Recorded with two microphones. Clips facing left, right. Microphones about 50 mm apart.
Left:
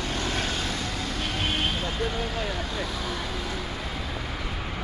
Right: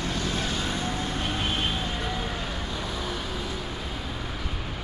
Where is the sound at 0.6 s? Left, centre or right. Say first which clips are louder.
Right 1 dB; right.